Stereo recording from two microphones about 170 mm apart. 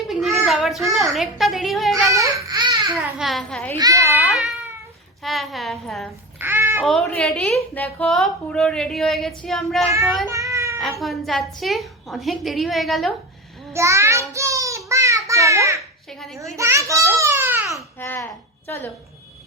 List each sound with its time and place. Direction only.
0.1 s child singing: centre (ahead or behind)
0.9 s a woman's voice: centre (ahead or behind)
2.0 s baby cry: 20° right (ahead or behind)
2.9 s a woman's voice: centre (ahead or behind)
3.8 s a child's voice: 20° right (ahead or behind)
5.2 s a woman's voice: centre (ahead or behind)
6.4 s babbling: 15° right (ahead or behind)
6.8 s a woman's voice: centre (ahead or behind)
10.2 s a sound: 20° right (ahead or behind)
11.0 s a woman's voice: centre (ahead or behind)
13.7 s child singing: 15° right (ahead or behind)
16.0 s a child's voice: centre (ahead or behind)
16.6 s a sound: 20° right (ahead or behind)
17.9 s a woman's voice: 15° left (ahead or behind)